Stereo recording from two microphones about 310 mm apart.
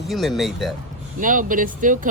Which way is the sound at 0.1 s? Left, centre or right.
Centre.